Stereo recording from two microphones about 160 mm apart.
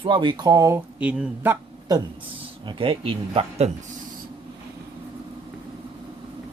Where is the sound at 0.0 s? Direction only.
30° right (ahead or behind).